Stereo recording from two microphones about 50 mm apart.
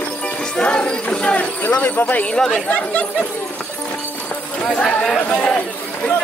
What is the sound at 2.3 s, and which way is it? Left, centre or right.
Speech, centre.